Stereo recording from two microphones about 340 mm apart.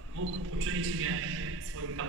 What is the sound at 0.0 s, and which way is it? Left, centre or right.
A man's voice, right.